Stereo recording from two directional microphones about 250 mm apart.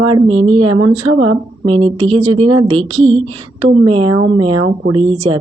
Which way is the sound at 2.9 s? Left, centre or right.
Right.